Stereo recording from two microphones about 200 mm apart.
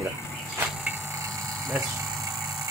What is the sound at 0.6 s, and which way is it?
Vehicle, 15° right (ahead or behind).